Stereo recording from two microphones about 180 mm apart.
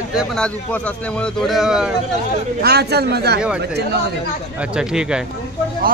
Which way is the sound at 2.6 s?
65° right (ahead or behind).